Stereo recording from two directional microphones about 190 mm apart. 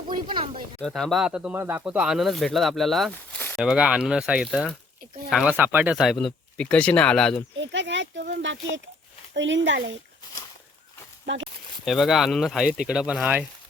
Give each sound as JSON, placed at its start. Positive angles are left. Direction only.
{"t": 0.1, "sound": "a sound", "side_deg": -25}
{"t": 0.8, "sound": "speech", "side_deg": 5}
{"t": 3.6, "sound": "speech", "side_deg": -5}
{"t": 7.6, "sound": "speech", "side_deg": -70}
{"t": 11.9, "sound": "speech", "side_deg": 0}